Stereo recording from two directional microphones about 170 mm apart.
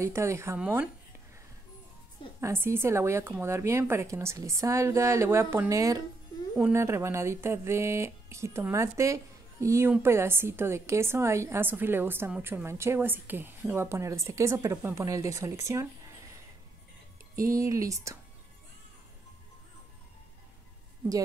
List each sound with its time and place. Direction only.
0.0 s speech: 15° right (ahead or behind)
2.4 s speech: 15° right (ahead or behind)
17.4 s speech: 20° right (ahead or behind)